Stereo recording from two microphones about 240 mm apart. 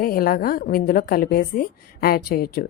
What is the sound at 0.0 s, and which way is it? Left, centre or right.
A woman's voice, left.